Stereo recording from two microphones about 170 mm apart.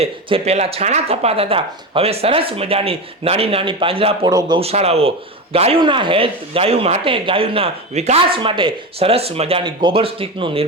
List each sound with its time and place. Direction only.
0.0 s speech: 35° right (ahead or behind)